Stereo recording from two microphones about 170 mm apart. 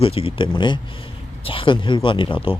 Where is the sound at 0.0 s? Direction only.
35° left (ahead or behind).